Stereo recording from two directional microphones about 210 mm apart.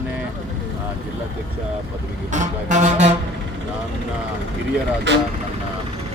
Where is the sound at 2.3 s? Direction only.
35° right (ahead or behind).